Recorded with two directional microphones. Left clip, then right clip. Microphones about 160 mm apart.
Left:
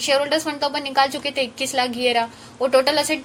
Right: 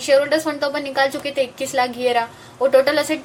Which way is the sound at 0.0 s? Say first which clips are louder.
Right 3 dB; 30° left (ahead or behind).